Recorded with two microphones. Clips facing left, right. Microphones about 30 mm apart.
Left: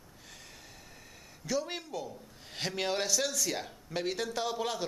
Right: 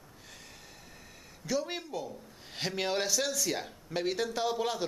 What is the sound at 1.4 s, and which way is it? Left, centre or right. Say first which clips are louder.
Speech: right 1 dB; centre.